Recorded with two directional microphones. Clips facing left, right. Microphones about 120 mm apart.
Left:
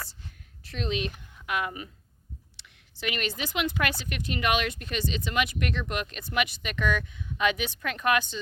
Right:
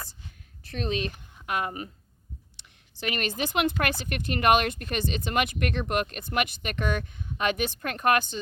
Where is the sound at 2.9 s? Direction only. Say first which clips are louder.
Right 2 dB; 45° right (ahead or behind).